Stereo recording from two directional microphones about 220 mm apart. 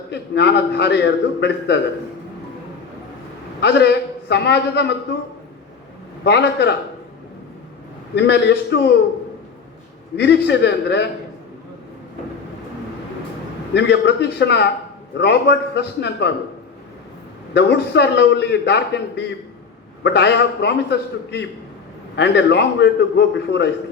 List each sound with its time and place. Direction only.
0.1 s a man's voice: 50° left (ahead or behind)
3.6 s a man's voice: 50° left (ahead or behind)
6.2 s a man's voice: 50° left (ahead or behind)
8.1 s a man's voice: 50° left (ahead or behind)
10.2 s a man's voice: 50° left (ahead or behind)
13.7 s a man's voice: 50° left (ahead or behind)
17.5 s a man's voice: 50° left (ahead or behind)